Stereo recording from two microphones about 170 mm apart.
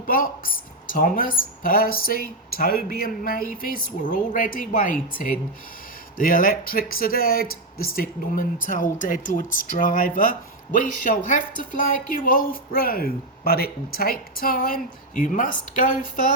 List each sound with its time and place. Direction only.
0.1 s speech: 55° left (ahead or behind)